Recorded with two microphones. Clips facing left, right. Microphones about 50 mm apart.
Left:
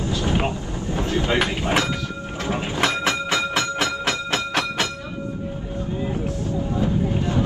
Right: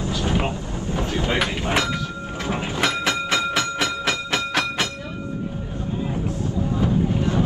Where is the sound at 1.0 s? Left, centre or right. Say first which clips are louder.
Left 2 dB; left.